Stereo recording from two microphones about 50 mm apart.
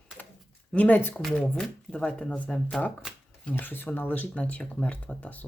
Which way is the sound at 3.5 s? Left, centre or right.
Left.